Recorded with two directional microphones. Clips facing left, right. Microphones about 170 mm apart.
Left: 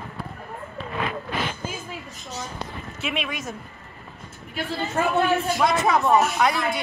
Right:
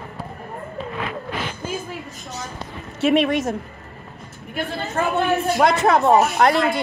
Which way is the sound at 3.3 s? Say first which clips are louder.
Right 11 dB; 75° right (ahead or behind).